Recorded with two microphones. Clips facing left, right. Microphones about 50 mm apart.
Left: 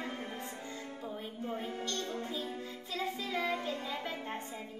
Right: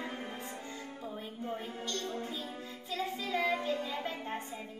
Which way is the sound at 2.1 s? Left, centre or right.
Right.